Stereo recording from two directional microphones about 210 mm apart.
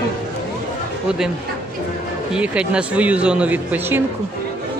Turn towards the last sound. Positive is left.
turn(degrees=-10)  # may be behind; listen again after turning